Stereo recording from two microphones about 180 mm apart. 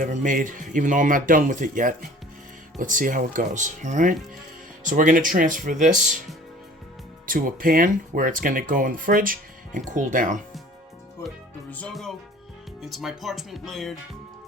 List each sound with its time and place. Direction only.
0.0 s speech: 45° right (ahead or behind)
7.3 s speech: 50° right (ahead or behind)
11.7 s speech: 5° left (ahead or behind)